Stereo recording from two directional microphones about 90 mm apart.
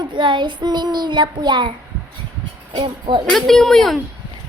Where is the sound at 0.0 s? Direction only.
60° right (ahead or behind).